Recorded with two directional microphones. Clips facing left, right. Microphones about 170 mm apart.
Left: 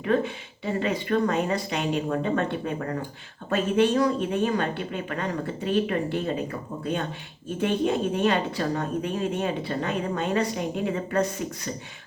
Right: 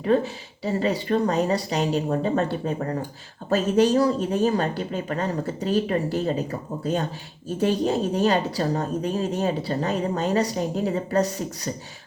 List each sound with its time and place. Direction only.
0.0 s speech: 35° right (ahead or behind)